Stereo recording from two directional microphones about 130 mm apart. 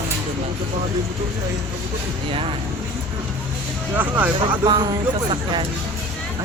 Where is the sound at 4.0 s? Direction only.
15° right (ahead or behind).